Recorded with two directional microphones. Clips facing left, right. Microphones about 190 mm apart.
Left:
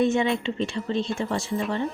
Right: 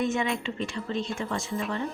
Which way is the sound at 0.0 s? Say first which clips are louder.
Left 5 dB; 30° left (ahead or behind).